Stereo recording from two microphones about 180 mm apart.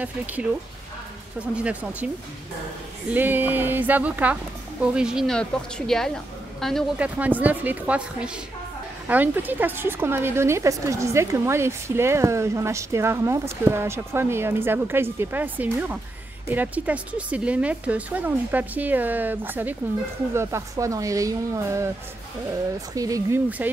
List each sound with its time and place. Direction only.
0.0 s a woman's voice: 10° right (ahead or behind)
3.1 s a woman's voice: 10° right (ahead or behind)
7.2 s a woman's voice: 10° right (ahead or behind)